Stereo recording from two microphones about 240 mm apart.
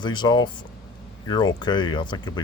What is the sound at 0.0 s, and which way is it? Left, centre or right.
Speech, centre.